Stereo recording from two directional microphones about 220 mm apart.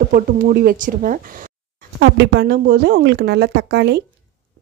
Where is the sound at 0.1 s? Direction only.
40° right (ahead or behind).